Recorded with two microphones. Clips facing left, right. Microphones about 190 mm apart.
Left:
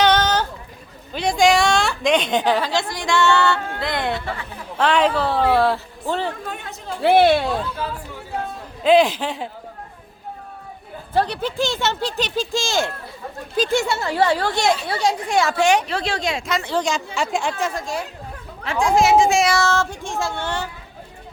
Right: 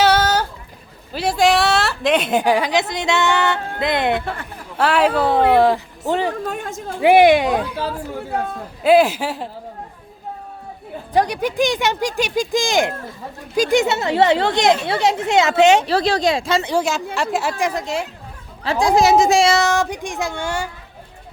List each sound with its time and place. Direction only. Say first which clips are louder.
0.0 s a sound: right 1 dB; 10° right (ahead or behind)
1.1 s a woman's voice: even; 5° right (ahead or behind); by 4.2 s 20° right (ahead or behind)
4.8 s speech: right 2 dB; 5° right (ahead or behind)
6.5 s a woman's voice: right 5 dB; 45° right (ahead or behind)
7.0 s speech: right 3 dB; 15° right (ahead or behind)
7.8 s speech: right 4 dB; 40° right (ahead or behind)
8.8 s speech: right 1 dB; 5° right (ahead or behind)
11.1 s speech: right 3 dB; 15° right (ahead or behind); by 16.6 s 30° right (ahead or behind)
16.6 s a woman's voice: right 2 dB; 5° right (ahead or behind)
17.6 s speech: right 3 dB; 20° right (ahead or behind)
18.6 s speech: right 2 dB; 35° right (ahead or behind)
19.5 s speech: right 3 dB; 15° right (ahead or behind)